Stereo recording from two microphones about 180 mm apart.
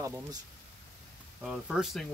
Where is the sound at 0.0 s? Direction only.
20° right (ahead or behind).